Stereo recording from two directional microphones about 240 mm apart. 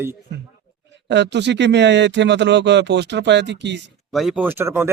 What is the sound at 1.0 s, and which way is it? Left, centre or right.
Speech, right.